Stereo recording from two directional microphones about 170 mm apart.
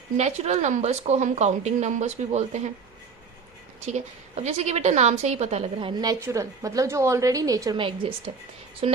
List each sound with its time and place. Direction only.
0.2 s a woman's voice: 40° right (ahead or behind)
3.8 s a woman's voice: 40° right (ahead or behind)
5.9 s a woman's voice: 20° right (ahead or behind)